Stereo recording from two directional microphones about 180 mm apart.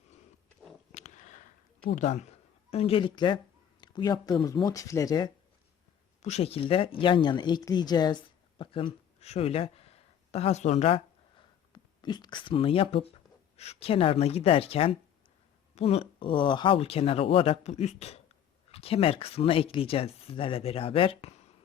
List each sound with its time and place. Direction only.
0.9 s a sound: 40° left (ahead or behind)
2.0 s speech: 40° left (ahead or behind); by 5.3 s 20° left (ahead or behind)
6.2 s speech: 35° left (ahead or behind)